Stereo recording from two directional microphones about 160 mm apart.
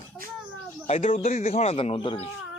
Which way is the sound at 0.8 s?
45° left (ahead or behind).